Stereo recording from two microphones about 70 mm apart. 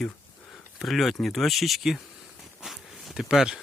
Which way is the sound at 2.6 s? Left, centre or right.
Centre.